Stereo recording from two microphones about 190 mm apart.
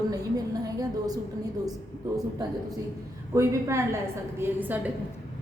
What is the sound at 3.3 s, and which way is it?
A woman's voice, 15° right (ahead or behind).